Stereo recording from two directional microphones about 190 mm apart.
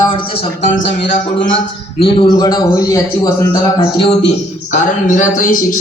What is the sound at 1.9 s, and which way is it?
A man's voice, 30° left (ahead or behind).